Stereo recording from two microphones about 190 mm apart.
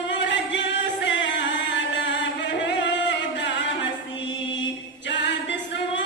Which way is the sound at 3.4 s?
75° left (ahead or behind).